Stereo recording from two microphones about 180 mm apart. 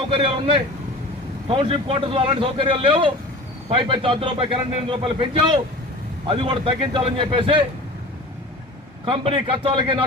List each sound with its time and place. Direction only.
0.1 s a man's voice: 30° right (ahead or behind)
9.0 s a man's voice: 30° right (ahead or behind)